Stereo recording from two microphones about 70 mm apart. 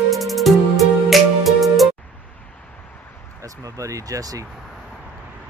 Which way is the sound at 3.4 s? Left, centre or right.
Right.